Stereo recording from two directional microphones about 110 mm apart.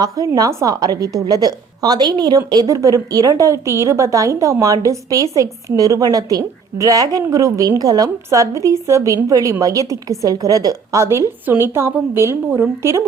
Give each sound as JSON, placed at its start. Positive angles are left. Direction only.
{"t": 0.0, "sound": "a woman's voice", "side_deg": -35}